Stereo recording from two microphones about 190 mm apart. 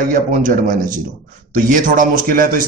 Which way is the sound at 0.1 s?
45° right (ahead or behind).